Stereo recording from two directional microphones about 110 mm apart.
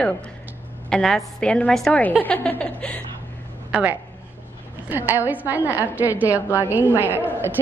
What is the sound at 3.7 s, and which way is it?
A woman's voice, 10° right (ahead or behind).